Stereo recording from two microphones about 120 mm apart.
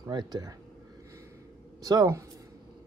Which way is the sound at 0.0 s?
35° right (ahead or behind).